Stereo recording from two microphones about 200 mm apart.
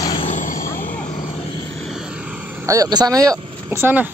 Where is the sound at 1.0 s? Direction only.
35° left (ahead or behind).